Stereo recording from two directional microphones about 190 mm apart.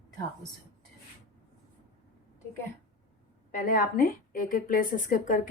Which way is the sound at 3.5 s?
45° left (ahead or behind).